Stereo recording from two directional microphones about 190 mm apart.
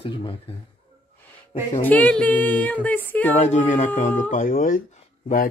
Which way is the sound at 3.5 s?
40° left (ahead or behind).